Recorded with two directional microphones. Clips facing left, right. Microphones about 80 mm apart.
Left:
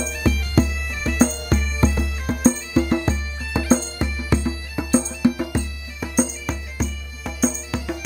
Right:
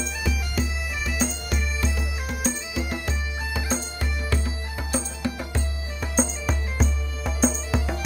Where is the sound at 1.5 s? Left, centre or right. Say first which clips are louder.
Left 7 dB; left; by 5.6 s centre.